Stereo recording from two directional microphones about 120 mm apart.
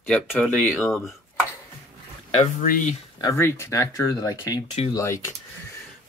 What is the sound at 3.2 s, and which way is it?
Speech, 25° left (ahead or behind).